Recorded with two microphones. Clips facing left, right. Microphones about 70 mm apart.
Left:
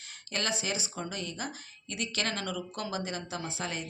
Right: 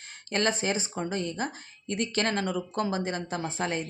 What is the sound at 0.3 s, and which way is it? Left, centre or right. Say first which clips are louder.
Speech: right 6 dB; right.